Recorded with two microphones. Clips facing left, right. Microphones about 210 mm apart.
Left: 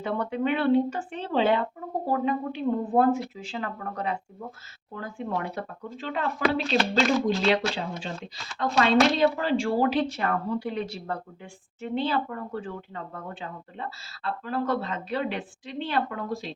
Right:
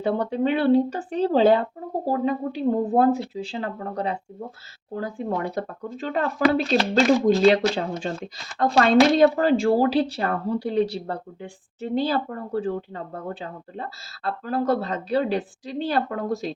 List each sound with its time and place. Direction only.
0.0 s speech: 35° right (ahead or behind)